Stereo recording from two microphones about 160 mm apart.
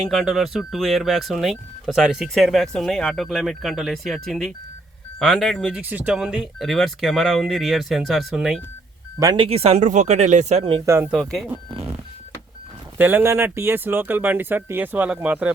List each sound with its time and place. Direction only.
0.1 s speech: centre (ahead or behind)
5.8 s speech: 10° right (ahead or behind)
9.1 s speech: 20° right (ahead or behind)
9.4 s speech: 40° right (ahead or behind)
10.8 s speech: 15° right (ahead or behind)
11.1 s speech: centre (ahead or behind)
13.0 s speech: 10° right (ahead or behind)